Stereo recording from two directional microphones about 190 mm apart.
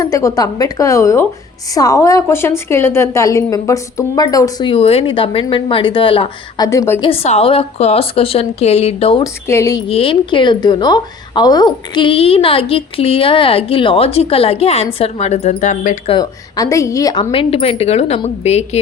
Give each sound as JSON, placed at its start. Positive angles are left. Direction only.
{"t": 0.0, "sound": "a woman's voice", "side_deg": 15}
{"t": 6.7, "sound": "speech", "side_deg": 15}
{"t": 7.0, "sound": "a woman's voice", "side_deg": 30}
{"t": 9.2, "sound": "speech", "side_deg": 15}
{"t": 9.9, "sound": "a woman's voice", "side_deg": 30}
{"t": 16.0, "sound": "a woman's voice", "side_deg": 20}